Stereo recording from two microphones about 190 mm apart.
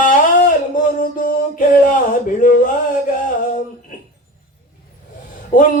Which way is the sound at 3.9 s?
45° left (ahead or behind).